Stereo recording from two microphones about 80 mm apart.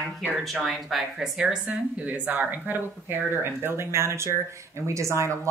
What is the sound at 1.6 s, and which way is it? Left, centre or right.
A woman's voice, centre.